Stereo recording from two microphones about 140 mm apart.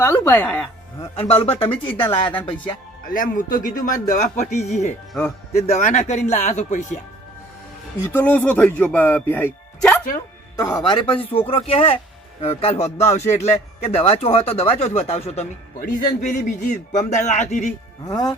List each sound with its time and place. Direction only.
0.0 s speech: 15° left (ahead or behind)
1.3 s speech: 40° left (ahead or behind)
3.1 s a man's voice: 75° left (ahead or behind); by 6.8 s 55° left (ahead or behind)
8.1 s speech: 15° left (ahead or behind)
10.6 s speech: 30° left (ahead or behind); by 15.4 s 45° left (ahead or behind)
15.8 s a man's voice: 80° left; by 17.7 s 60° left (ahead or behind)
18.0 s speech: 30° left (ahead or behind)